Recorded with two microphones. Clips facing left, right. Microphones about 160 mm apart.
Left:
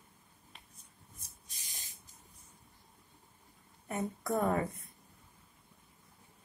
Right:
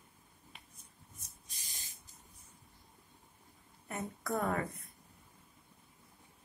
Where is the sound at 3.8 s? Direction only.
25° left (ahead or behind).